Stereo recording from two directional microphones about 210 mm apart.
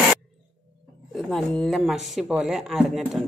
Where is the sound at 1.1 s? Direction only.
Centre (ahead or behind).